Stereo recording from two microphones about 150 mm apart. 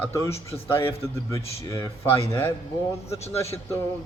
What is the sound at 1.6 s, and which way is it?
Speech, 25° left (ahead or behind).